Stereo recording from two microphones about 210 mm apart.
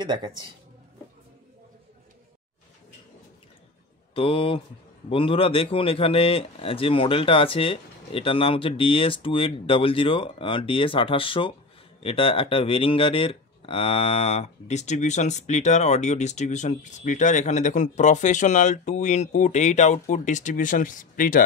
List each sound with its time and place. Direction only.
0.0 s speech: 20° right (ahead or behind)
4.1 s speech: 25° left (ahead or behind)